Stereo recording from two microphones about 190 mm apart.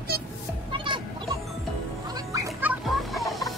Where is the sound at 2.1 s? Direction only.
20° right (ahead or behind).